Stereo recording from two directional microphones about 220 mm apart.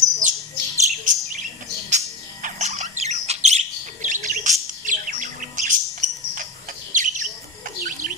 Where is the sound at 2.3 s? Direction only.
35° right (ahead or behind).